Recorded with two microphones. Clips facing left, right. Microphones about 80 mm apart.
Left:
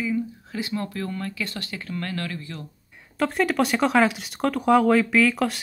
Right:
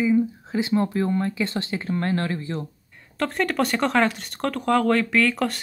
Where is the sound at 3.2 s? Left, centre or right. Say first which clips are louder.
Left 1 dB; centre.